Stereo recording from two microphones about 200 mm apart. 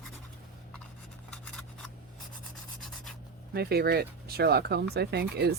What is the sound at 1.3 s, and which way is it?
Scissors, 5° left (ahead or behind).